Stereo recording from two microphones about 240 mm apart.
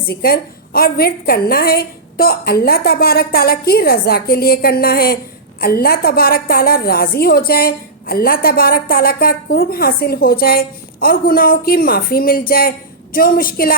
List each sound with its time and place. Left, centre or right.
0.1 s a woman's voice: left